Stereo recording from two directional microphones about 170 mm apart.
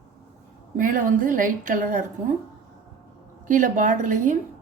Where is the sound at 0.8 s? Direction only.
50° right (ahead or behind).